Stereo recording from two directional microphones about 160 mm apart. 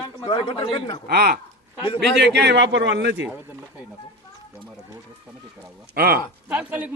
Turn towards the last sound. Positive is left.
turn(degrees=-10)  # may be behind; listen again after turning